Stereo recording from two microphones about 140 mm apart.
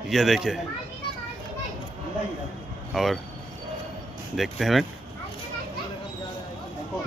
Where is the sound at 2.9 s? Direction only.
5° right (ahead or behind).